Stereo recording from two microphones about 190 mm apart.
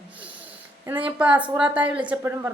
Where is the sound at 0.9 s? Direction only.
10° right (ahead or behind).